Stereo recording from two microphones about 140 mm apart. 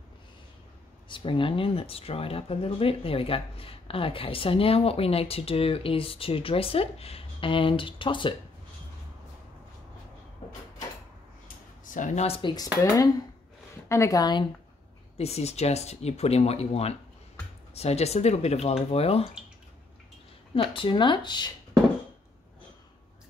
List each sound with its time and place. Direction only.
1.0 s speech: 35° left (ahead or behind)
11.4 s a sound: 70° left (ahead or behind)
12.3 s speech: 35° left (ahead or behind)
13.8 s a woman's voice: 20° left (ahead or behind)
15.1 s speech: 50° left (ahead or behind)
20.5 s speech: 40° left (ahead or behind)